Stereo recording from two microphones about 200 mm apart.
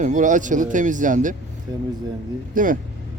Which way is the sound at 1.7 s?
20° right (ahead or behind).